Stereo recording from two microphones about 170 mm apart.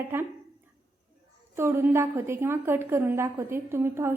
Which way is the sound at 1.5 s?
15° right (ahead or behind).